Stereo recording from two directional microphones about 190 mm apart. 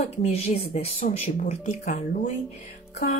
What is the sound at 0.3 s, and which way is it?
Speech, 35° left (ahead or behind).